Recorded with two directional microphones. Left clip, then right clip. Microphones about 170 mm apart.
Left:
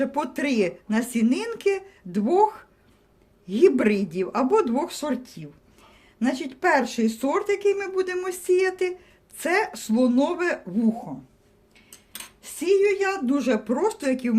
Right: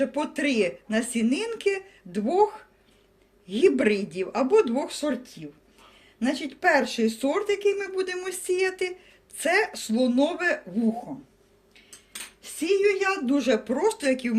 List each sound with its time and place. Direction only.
0.0 s speech: 70° left (ahead or behind)
12.4 s speech: 90° left; by 14.3 s 60° left (ahead or behind)